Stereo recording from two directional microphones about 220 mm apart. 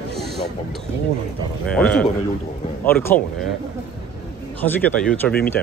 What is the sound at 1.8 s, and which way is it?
A man's voice, 5° left (ahead or behind).